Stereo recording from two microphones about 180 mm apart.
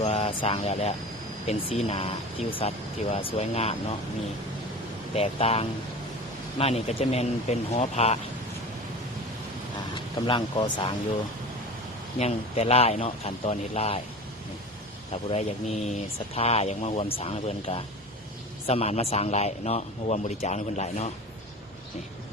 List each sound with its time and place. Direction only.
0.0 s speech: 35° left (ahead or behind)
5.1 s speech: 35° left (ahead or behind)
10.2 s speech: 25° left (ahead or behind)
12.2 s speech: 35° left (ahead or behind)
15.1 s speech: 35° left (ahead or behind)